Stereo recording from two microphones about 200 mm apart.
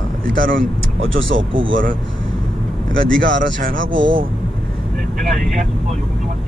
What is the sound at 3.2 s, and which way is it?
Speech, 65° right (ahead or behind).